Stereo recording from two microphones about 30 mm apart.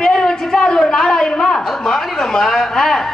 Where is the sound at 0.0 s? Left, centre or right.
Centre.